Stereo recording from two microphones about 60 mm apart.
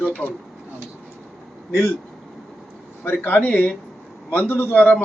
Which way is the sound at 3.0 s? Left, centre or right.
Left.